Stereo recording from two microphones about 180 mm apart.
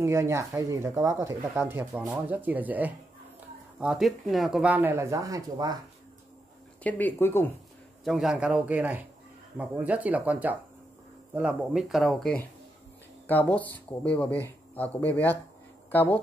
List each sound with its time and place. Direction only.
0.0 s speech: 15° right (ahead or behind)
6.8 s speech: 10° left (ahead or behind)
8.0 s speech: centre (ahead or behind)